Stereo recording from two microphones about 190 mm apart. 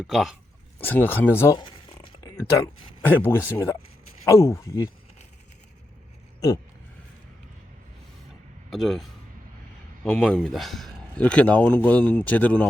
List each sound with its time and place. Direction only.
0.0 s speech: centre (ahead or behind)
0.8 s a man's voice: 10° left (ahead or behind)
1.5 s zipper: 25° left (ahead or behind)
2.2 s a man's voice: 15° left (ahead or behind)
8.7 s a man's voice: centre (ahead or behind)